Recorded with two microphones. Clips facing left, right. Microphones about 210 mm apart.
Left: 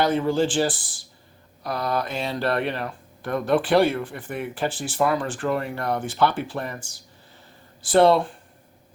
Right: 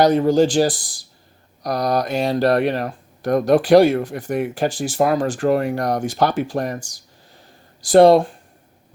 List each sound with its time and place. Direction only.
0.0 s speech: 40° right (ahead or behind)
7.9 s speech: 40° right (ahead or behind)